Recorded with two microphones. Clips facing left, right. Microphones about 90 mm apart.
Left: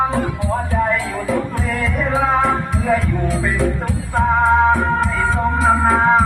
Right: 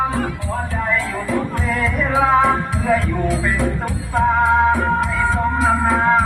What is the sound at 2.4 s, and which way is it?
Music, centre (ahead or behind).